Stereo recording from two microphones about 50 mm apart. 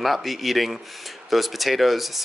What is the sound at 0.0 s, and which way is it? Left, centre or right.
Speech, centre.